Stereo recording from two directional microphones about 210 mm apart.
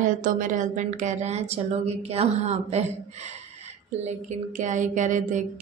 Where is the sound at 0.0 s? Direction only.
40° right (ahead or behind).